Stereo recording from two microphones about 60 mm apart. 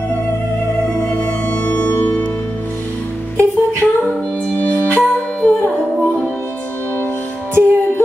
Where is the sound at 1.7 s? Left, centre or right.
Left.